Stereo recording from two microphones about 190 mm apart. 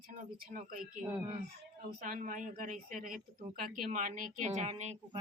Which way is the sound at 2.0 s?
45° right (ahead or behind).